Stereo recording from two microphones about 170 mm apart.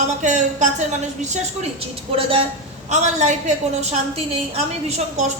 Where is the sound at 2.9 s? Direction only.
45° right (ahead or behind).